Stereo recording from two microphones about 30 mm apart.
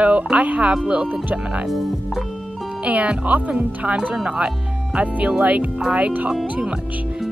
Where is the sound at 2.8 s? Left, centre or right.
Right.